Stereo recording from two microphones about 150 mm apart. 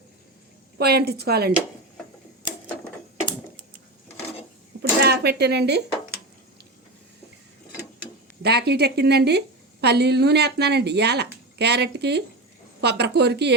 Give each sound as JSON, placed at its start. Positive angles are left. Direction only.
{"t": 0.8, "sound": "speech", "side_deg": -90}
{"t": 4.8, "sound": "a sound", "side_deg": -90}
{"t": 8.4, "sound": "speech", "side_deg": -90}